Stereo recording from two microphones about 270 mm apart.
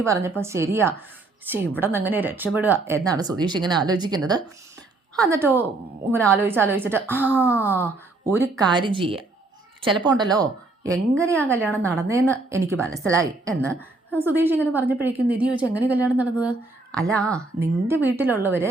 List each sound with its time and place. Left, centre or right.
0.0 s a woman's voice: centre
11.7 s a woman's voice: centre
11.9 s a woman's voice: centre
13.5 s a woman's voice: centre
14.2 s a woman's voice: centre
17.6 s a woman's voice: centre